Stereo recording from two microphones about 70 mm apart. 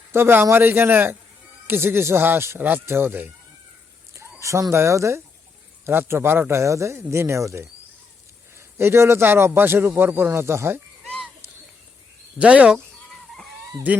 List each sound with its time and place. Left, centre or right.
0.1 s a man's voice: right
4.4 s a sound: right
4.7 s speech: right
5.8 s a man's voice: right
11.0 s a sound: centre
12.4 s speech: centre
12.7 s fowl: centre
13.9 s speech: right